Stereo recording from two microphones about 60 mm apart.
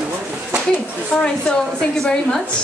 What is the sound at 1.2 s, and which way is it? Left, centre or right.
A woman's voice, centre.